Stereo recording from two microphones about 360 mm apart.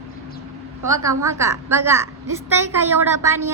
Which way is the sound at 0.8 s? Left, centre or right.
Centre.